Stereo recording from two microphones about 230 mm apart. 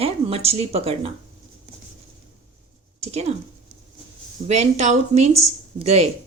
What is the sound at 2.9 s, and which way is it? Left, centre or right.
Speech, right.